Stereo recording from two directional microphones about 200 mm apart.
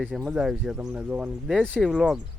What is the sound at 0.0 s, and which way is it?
Speech, 5° right (ahead or behind).